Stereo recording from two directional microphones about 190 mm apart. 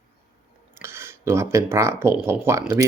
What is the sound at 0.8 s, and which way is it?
Speech, 15° right (ahead or behind).